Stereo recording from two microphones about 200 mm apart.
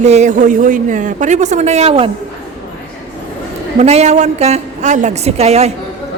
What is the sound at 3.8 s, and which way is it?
A woman's voice, 35° right (ahead or behind).